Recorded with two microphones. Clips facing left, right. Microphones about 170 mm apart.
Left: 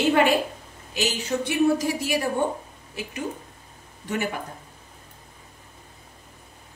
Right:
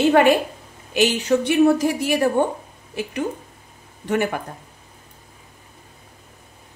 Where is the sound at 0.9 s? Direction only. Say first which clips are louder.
Right 8 dB; 60° right (ahead or behind).